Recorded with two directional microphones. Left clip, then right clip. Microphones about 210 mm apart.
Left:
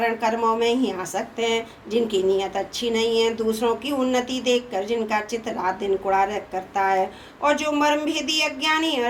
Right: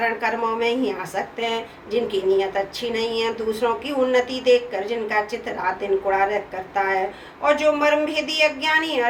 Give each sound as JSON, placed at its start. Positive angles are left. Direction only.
{"t": 0.0, "sound": "speech", "side_deg": 55}
{"t": 7.4, "sound": "speech", "side_deg": 55}